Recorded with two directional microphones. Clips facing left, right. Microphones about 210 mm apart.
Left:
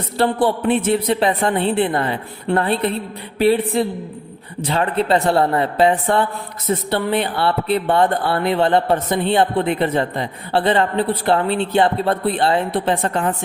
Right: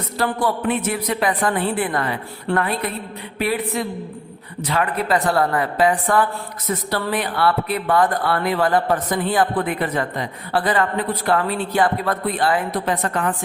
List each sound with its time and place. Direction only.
0.2 s speech: 30° left (ahead or behind)